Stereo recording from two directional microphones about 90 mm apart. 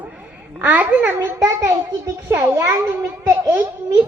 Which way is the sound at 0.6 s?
20° right (ahead or behind).